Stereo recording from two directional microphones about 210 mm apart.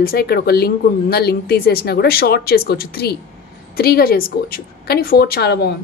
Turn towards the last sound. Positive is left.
turn(degrees=50)  # may be behind; listen again after turning